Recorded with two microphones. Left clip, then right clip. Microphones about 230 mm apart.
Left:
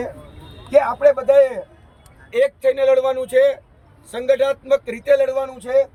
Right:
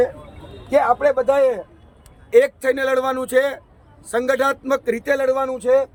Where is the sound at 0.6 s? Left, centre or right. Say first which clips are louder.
Left 2 dB; centre.